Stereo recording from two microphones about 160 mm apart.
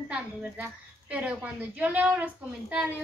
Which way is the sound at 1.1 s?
10° right (ahead or behind).